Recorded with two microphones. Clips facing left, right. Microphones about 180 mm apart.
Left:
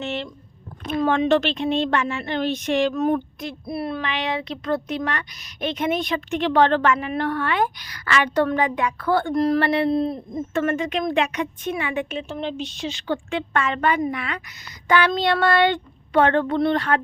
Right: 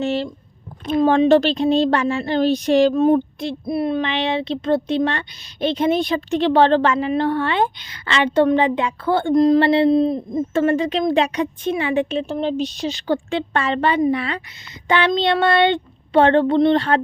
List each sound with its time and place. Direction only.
0.0 s speech: 35° right (ahead or behind); by 10.4 s 20° right (ahead or behind)
10.5 s speech: 30° right (ahead or behind)